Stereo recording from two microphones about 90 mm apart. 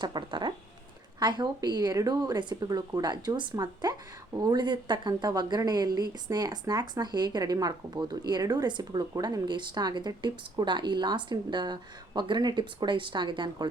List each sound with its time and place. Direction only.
0.0 s speech: 60° right (ahead or behind)
2.6 s speech: 45° right (ahead or behind)